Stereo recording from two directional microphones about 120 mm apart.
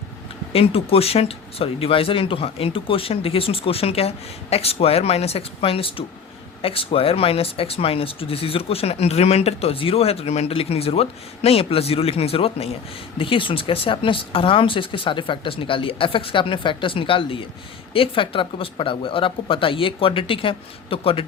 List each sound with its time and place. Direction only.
0.5 s speech: 55° left (ahead or behind)